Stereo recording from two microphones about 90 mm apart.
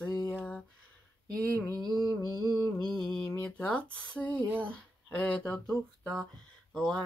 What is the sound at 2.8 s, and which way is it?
Mantra, 5° left (ahead or behind).